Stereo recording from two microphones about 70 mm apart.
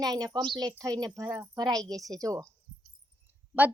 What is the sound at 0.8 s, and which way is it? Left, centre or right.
Speech, right.